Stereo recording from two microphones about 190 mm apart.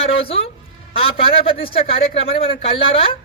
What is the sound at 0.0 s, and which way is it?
A man's voice, 30° left (ahead or behind).